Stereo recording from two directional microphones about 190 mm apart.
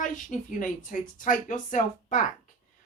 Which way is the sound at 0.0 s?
45° left (ahead or behind).